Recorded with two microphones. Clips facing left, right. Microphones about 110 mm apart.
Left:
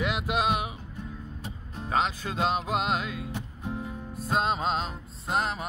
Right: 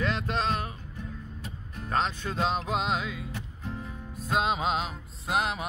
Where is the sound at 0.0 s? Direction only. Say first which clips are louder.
Left 2 dB; 10° left (ahead or behind).